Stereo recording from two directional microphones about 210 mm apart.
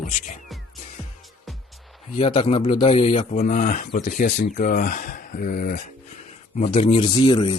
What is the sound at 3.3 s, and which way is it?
Speech, 40° left (ahead or behind).